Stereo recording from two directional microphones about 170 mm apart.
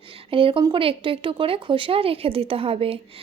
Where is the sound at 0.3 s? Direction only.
30° right (ahead or behind).